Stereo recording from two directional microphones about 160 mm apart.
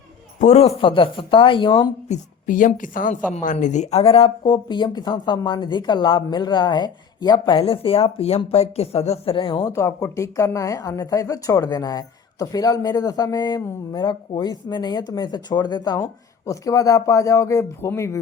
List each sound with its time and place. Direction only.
0.3 s a man's voice: 45° left (ahead or behind)
0.8 s a woman's voice: 35° left (ahead or behind)
2.0 s a woman's voice: 50° left (ahead or behind); by 9.6 s 35° left (ahead or behind)
9.6 s speech: 20° left (ahead or behind)